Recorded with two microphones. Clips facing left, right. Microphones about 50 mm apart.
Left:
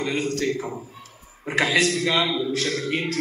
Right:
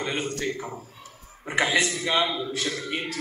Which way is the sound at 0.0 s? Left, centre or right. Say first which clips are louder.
Left 4 dB; right.